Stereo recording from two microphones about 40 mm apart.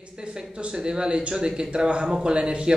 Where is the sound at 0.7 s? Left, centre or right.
Right.